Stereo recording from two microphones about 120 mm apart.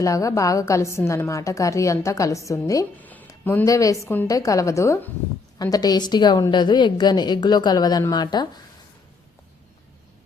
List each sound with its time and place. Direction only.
0.0 s a woman's voice: 25° left (ahead or behind)
3.0 s a sound: 15° left (ahead or behind)
3.7 s a woman's voice: 30° left (ahead or behind)